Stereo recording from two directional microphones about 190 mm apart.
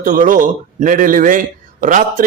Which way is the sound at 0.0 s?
45° right (ahead or behind).